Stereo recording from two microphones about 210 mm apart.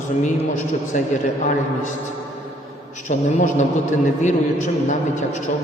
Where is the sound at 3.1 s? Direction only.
35° left (ahead or behind).